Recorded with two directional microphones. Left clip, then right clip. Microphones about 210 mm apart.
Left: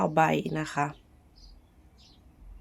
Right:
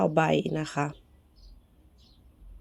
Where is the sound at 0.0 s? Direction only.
15° right (ahead or behind).